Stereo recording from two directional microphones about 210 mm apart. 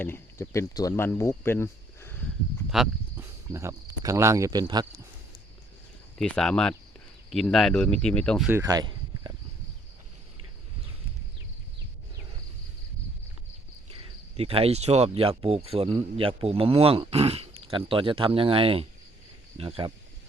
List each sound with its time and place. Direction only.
0.0 s speech: 10° left (ahead or behind)
2.6 s cricket: centre (ahead or behind)
3.5 s speech: 15° right (ahead or behind)
6.1 s speech: 5° left (ahead or behind)
8.4 s a sound: 15° right (ahead or behind)
13.9 s speech: 25° right (ahead or behind)